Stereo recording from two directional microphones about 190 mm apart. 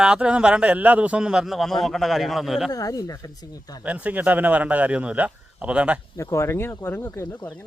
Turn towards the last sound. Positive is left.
turn(degrees=15)  # may be behind; listen again after turning